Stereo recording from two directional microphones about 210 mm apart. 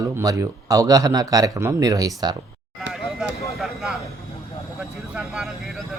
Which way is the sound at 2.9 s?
Centre (ahead or behind).